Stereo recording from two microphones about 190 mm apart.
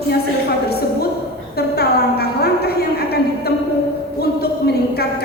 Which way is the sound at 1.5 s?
55° left (ahead or behind).